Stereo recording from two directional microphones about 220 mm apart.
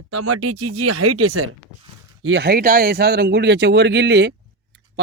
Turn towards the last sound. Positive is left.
turn(degrees=-50)  # may be behind; listen again after turning